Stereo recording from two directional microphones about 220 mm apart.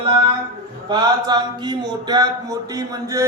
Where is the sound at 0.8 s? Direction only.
20° right (ahead or behind).